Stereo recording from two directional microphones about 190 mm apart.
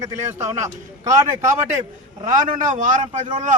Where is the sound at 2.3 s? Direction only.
40° right (ahead or behind).